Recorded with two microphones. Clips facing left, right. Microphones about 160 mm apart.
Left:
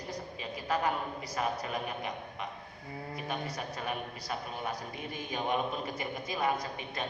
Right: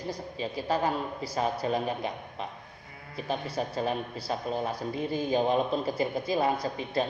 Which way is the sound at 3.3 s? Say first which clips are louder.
Right 8 dB; 30° right (ahead or behind).